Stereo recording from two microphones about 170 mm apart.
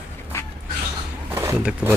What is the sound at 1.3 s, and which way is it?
Speech, 15° right (ahead or behind).